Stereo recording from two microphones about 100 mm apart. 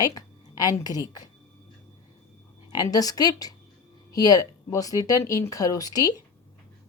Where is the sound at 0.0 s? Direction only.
40° left (ahead or behind).